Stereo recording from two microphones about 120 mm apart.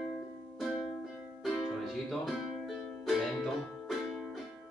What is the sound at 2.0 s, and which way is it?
Music, centre (ahead or behind).